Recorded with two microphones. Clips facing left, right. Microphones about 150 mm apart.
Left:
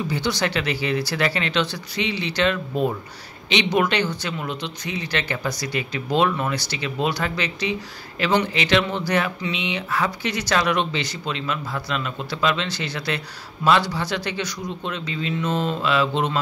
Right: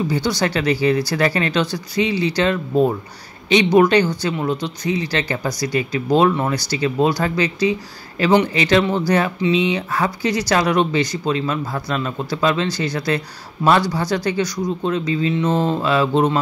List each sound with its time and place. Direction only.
0.1 s speech: 40° right (ahead or behind)
8.5 s speech: 40° right (ahead or behind)